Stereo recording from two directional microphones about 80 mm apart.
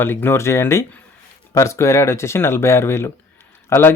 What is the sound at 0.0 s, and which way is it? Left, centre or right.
Speech, left.